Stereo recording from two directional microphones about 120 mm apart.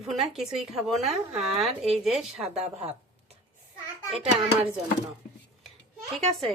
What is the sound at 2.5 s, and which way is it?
Speech, 60° right (ahead or behind).